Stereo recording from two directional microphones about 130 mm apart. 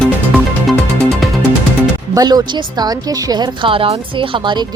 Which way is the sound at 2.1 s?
30° right (ahead or behind).